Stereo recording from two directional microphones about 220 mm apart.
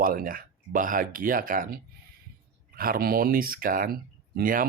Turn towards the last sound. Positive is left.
turn(degrees=-40)  # may be behind; listen again after turning